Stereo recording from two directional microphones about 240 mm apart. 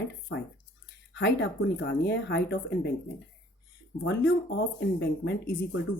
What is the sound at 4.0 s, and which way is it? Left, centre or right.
Speech, left.